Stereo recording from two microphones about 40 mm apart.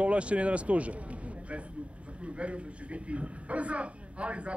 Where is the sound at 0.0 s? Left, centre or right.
Right.